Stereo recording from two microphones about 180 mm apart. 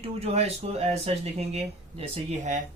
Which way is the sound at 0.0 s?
35° right (ahead or behind).